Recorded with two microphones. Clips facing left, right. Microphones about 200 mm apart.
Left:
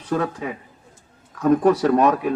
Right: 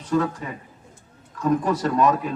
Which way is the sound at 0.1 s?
65° left (ahead or behind).